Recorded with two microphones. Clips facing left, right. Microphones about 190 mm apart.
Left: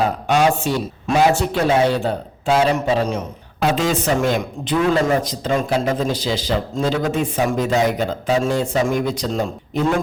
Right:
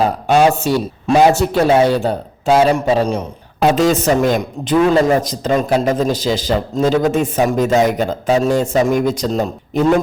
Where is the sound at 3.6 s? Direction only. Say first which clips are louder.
Right 6 dB; 40° right (ahead or behind).